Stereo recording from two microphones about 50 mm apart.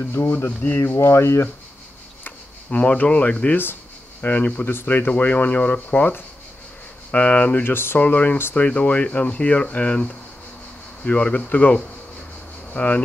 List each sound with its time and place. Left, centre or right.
0.2 s speech: left
0.9 s speech: left
2.7 s speech: left
7.6 s speech: left
8.0 s speech: left